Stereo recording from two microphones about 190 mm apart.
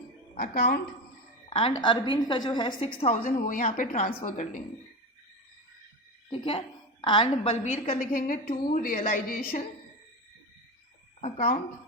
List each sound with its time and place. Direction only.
0.3 s a woman's voice: 50° left (ahead or behind)
1.5 s a woman's voice: 25° left (ahead or behind)
6.3 s a woman's voice: 30° left (ahead or behind)
7.6 s a woman's voice: 40° left (ahead or behind)
11.3 s a woman's voice: 45° left (ahead or behind)